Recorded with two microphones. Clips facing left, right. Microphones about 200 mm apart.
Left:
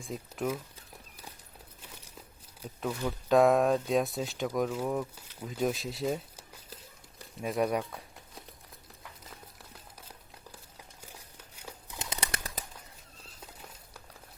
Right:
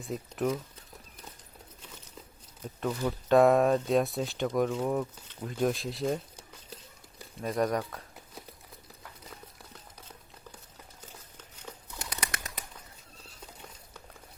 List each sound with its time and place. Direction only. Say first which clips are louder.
0.0 s speech: right 3 dB; centre (ahead or behind)
3.0 s speech: right 2 dB; centre (ahead or behind)
11.6 s bird: even; 20° left (ahead or behind)